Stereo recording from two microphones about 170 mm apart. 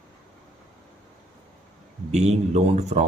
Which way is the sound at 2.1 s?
40° right (ahead or behind).